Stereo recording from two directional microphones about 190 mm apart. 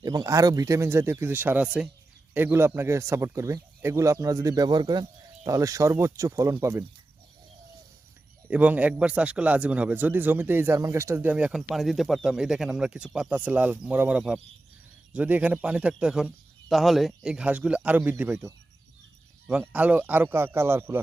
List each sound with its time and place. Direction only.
0.0 s speech: 20° right (ahead or behind)
8.4 s speech: 10° right (ahead or behind)